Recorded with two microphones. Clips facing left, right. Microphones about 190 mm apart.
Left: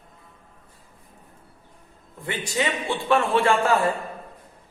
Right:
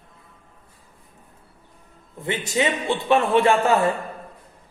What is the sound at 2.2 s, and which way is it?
A man's voice, 20° right (ahead or behind).